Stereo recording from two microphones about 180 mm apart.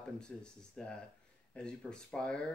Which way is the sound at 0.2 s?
5° left (ahead or behind).